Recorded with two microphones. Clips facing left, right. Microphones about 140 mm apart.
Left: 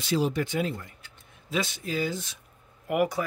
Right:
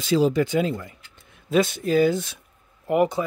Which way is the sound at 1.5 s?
50° right (ahead or behind).